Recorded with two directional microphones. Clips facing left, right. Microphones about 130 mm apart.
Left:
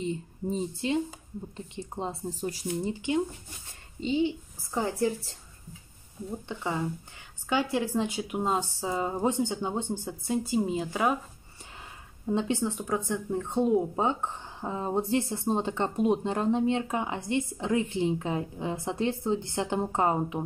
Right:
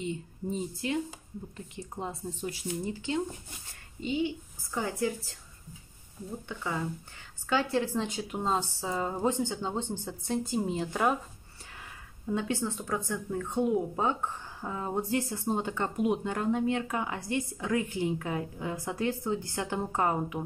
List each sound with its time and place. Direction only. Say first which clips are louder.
0.0 s speech: left 3 dB; 35° left (ahead or behind)
2.9 s speech: left 4 dB; 20° left (ahead or behind)
7.4 s speech: left 1 dB; 15° left (ahead or behind)
12.3 s speech: left 3 dB; 25° left (ahead or behind)